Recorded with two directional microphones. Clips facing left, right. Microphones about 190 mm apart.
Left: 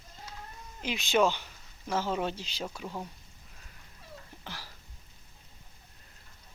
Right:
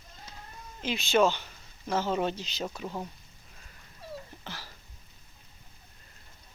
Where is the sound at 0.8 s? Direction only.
15° left (ahead or behind).